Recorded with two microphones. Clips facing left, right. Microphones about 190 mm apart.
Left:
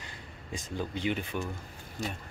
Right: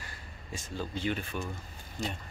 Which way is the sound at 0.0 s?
20° left (ahead or behind).